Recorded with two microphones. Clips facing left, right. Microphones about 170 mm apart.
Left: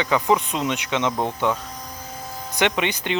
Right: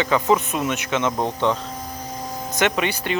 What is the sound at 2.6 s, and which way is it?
Speech, 15° left (ahead or behind).